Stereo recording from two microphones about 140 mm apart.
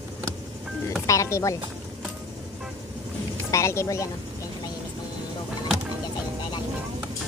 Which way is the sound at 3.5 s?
20° left (ahead or behind).